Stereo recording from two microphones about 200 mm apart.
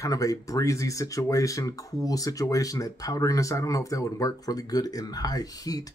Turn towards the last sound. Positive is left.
turn(degrees=20)  # may be behind; listen again after turning